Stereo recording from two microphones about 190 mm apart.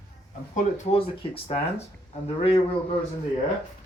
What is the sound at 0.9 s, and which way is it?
Speech, 35° left (ahead or behind).